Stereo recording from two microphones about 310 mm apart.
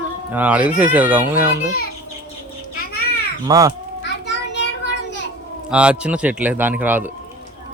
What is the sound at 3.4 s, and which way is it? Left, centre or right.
Speech, centre.